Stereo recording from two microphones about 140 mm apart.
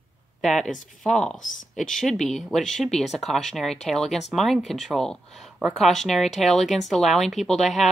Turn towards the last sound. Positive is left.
turn(degrees=0)  # may be behind; listen again after turning